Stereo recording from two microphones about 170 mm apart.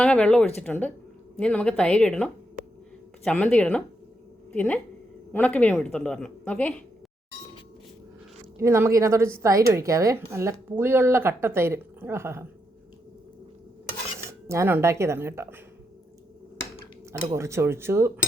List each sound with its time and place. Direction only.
0.0 s a woman's voice: 5° left (ahead or behind)
8.5 s a woman's voice: 15° right (ahead or behind)
14.4 s a woman's voice: 15° right (ahead or behind)
17.1 s a woman's voice: 15° right (ahead or behind)